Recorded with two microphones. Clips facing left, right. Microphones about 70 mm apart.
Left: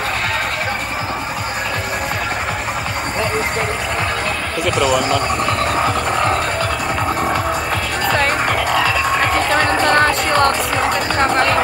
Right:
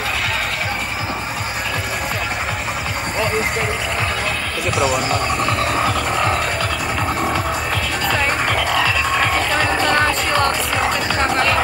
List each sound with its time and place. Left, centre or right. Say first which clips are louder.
4.6 s speech: left 3 dB; left
8.5 s music: left 2 dB; left
9.4 s music: left 3 dB; left
11.1 s music: left 3 dB; left